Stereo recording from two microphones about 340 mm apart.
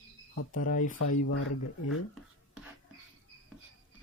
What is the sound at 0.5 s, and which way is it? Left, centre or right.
Speech, left.